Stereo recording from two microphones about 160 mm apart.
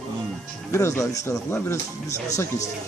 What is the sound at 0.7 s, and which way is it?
Speech, 20° left (ahead or behind).